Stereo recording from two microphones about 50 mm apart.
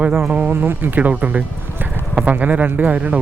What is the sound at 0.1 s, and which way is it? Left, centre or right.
Speech, right.